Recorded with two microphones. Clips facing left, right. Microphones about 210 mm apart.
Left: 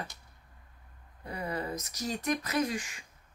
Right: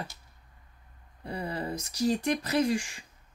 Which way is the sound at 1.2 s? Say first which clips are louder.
Right 2 dB; 30° right (ahead or behind).